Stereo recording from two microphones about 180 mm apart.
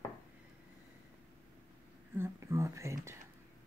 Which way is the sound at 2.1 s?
15° right (ahead or behind).